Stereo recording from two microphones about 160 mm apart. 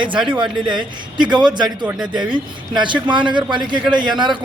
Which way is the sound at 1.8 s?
5° right (ahead or behind).